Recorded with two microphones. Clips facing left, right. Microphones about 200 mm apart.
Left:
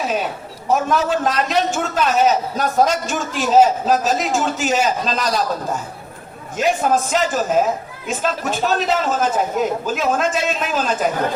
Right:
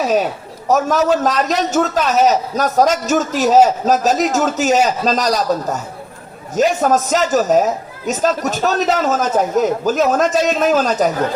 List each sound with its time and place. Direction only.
0.7 s a man's voice: 40° right (ahead or behind)